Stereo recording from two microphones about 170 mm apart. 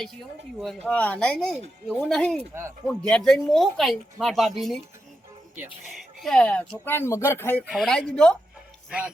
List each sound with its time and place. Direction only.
0.6 s speech: centre (ahead or behind)
2.5 s speech: 15° right (ahead or behind)
2.8 s speech: 5° left (ahead or behind)
7.6 s speech: centre (ahead or behind)